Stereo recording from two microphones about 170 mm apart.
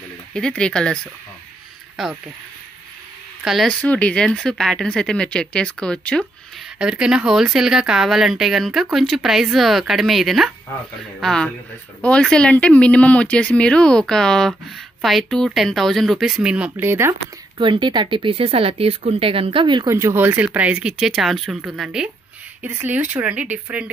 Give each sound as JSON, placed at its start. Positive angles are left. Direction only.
{"t": 0.3, "sound": "speech", "side_deg": 5}
{"t": 2.0, "sound": "speech", "side_deg": 0}
{"t": 3.4, "sound": "speech", "side_deg": 0}
{"t": 17.6, "sound": "speech", "side_deg": -30}